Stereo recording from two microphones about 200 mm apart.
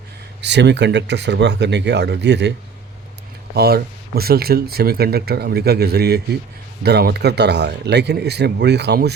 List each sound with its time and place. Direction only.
0.4 s speech: 60° right (ahead or behind)
3.5 s speech: 50° right (ahead or behind)